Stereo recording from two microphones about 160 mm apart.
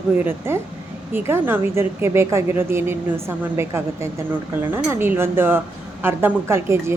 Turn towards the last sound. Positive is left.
turn(degrees=-15)  # may be behind; listen again after turning